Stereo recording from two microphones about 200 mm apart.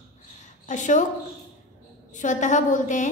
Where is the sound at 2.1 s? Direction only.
40° left (ahead or behind).